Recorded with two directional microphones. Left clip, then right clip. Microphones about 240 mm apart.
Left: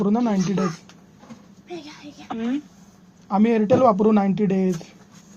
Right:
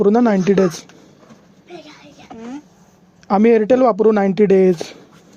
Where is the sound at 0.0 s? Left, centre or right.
Right.